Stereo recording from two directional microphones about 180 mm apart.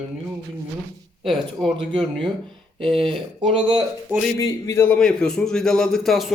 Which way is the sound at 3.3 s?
25° right (ahead or behind).